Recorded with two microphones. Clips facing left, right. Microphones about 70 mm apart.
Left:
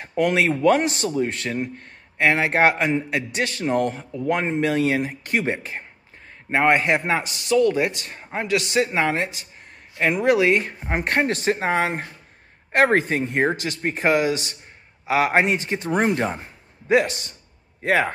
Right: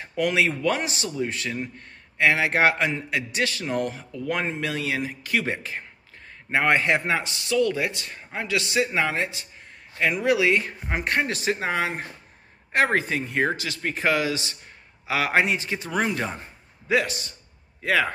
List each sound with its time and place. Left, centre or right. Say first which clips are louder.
0.0 s a man's voice: left 3 dB; left
12.7 s a man's voice: left 4 dB; left